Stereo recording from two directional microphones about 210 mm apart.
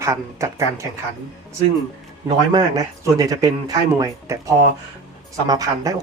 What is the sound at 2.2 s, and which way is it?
Speech, 20° right (ahead or behind).